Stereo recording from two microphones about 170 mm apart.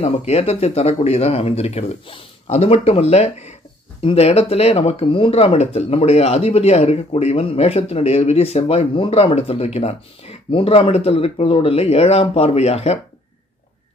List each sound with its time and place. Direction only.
0.0 s speech: 40° left (ahead or behind)